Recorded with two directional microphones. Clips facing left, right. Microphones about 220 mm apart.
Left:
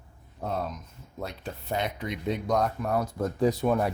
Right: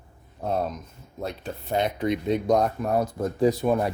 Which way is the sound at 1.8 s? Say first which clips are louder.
Right 9 dB; 30° right (ahead or behind).